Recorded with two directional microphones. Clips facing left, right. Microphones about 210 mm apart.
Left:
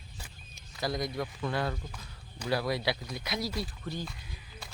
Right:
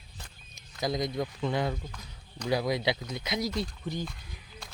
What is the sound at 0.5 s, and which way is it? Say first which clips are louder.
Speech: right 2 dB; 20° right (ahead or behind).